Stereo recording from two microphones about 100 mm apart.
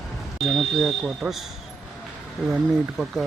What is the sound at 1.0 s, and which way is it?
Speech, 5° right (ahead or behind).